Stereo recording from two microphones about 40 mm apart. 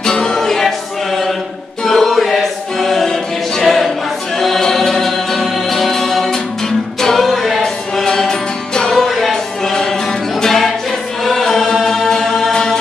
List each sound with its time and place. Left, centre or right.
0.0 s music: centre
1.9 s choir: centre
4.4 s music: centre
8.9 s music: centre
11.2 s chant: centre